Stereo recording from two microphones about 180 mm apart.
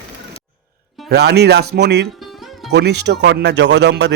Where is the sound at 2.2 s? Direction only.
Centre (ahead or behind).